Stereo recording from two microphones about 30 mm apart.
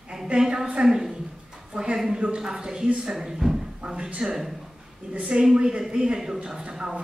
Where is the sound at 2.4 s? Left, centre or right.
Right.